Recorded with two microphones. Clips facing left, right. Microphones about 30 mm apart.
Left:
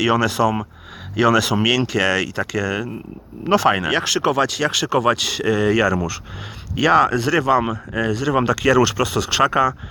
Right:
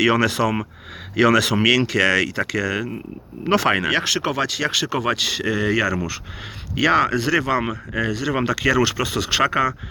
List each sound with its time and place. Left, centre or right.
0.0 s speech: right
3.5 s speech: right
3.8 s speech: right; by 5.1 s centre
5.1 s speech: right
5.4 s speech: centre
6.7 s speech: right
9.4 s speech: centre